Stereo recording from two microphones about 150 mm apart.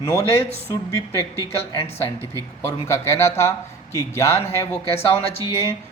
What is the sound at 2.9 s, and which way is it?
Speech, 20° left (ahead or behind).